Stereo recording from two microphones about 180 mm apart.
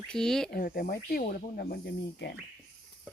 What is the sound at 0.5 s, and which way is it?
Speech, 55° left (ahead or behind).